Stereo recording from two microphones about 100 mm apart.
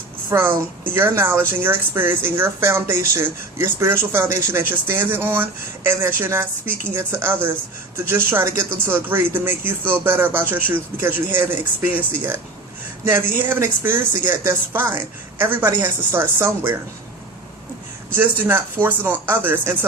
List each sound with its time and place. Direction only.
0.3 s speech: 25° right (ahead or behind)
18.1 s speech: 20° right (ahead or behind)